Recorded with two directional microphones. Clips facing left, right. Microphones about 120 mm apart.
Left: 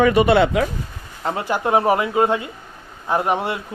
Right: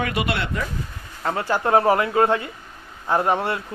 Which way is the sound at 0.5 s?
90° left.